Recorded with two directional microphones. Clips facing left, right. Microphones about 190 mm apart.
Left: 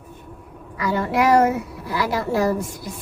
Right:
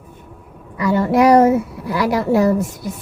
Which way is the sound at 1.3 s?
30° right (ahead or behind).